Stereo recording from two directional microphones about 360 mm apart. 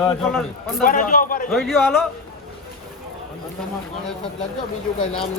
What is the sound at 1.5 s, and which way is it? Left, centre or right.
Speech, centre.